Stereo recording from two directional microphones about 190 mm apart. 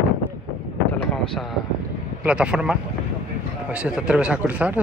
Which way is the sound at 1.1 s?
5° left (ahead or behind).